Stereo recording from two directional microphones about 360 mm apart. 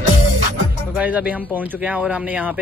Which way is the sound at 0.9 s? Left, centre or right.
Centre.